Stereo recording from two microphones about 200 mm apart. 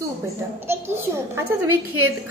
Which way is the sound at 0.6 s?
10° right (ahead or behind).